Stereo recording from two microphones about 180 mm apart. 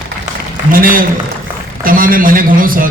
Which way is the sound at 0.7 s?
50° right (ahead or behind).